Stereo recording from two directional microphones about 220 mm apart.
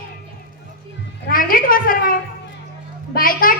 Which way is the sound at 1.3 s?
40° left (ahead or behind).